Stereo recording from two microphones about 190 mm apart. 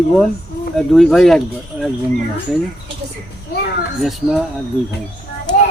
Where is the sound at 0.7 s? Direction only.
Centre (ahead or behind).